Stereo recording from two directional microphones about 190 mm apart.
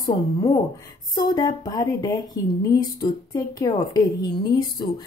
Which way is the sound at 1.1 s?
20° left (ahead or behind).